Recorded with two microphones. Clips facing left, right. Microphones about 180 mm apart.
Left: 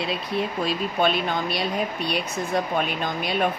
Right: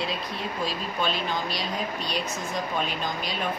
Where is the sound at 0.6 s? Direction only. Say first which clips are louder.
Left 4 dB; 60° left (ahead or behind).